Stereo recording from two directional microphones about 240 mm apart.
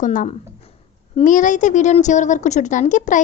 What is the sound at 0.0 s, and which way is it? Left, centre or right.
A woman's voice, left.